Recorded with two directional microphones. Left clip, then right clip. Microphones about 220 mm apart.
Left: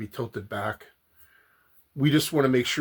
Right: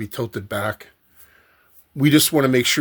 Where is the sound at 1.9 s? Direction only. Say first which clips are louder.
Right 7 dB; 45° right (ahead or behind).